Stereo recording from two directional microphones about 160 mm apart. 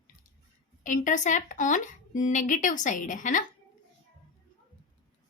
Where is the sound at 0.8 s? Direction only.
50° left (ahead or behind).